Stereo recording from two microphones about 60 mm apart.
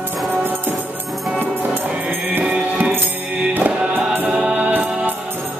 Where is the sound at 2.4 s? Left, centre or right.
Right.